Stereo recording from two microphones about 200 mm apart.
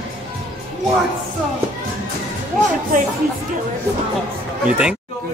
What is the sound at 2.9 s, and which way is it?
Speech, 40° right (ahead or behind).